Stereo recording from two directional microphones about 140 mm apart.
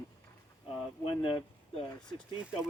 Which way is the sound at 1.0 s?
35° left (ahead or behind).